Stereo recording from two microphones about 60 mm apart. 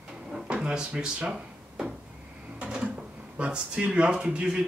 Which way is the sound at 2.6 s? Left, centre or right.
Centre.